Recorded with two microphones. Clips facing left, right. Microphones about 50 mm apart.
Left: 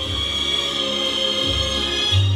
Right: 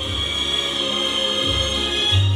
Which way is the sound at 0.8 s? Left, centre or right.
Right.